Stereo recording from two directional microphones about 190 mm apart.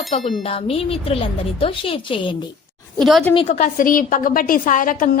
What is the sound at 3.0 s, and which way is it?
Speech, centre (ahead or behind).